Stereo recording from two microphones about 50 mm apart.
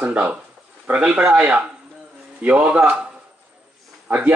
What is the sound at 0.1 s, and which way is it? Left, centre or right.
Speech, right.